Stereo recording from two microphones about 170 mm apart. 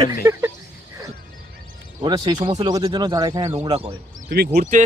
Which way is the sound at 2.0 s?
25° right (ahead or behind).